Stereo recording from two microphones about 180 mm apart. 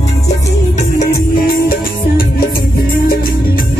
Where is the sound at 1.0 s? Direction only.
55° left (ahead or behind).